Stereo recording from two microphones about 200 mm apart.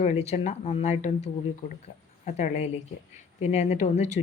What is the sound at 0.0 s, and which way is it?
Speech, 35° left (ahead or behind).